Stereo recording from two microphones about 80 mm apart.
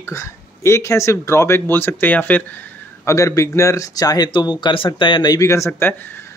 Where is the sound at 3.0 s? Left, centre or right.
Left.